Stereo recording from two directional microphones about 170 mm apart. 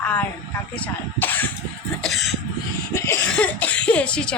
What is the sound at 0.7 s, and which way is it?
Speech, 10° left (ahead or behind).